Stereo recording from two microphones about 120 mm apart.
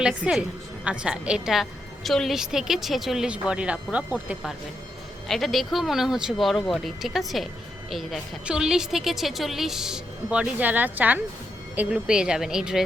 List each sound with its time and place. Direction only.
0.0 s a woman's voice: 5° right (ahead or behind)
5.3 s a woman's voice: centre (ahead or behind)